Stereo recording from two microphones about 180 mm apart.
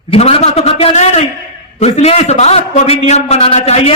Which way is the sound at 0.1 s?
35° left (ahead or behind).